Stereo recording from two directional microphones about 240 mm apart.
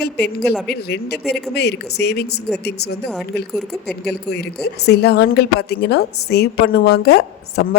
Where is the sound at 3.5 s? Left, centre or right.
Centre.